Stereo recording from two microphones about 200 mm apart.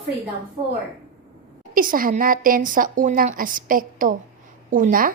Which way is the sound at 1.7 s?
45° right (ahead or behind).